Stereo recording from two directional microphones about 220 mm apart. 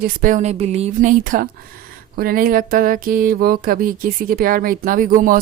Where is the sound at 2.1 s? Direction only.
40° right (ahead or behind).